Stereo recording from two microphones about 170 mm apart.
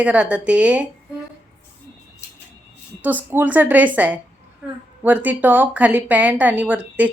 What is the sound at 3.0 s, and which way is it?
A woman's voice, 10° right (ahead or behind).